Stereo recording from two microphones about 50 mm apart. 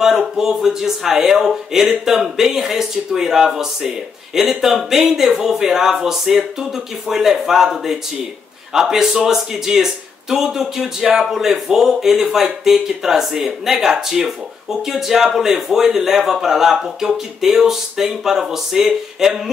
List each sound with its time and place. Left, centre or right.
0.0 s speech: centre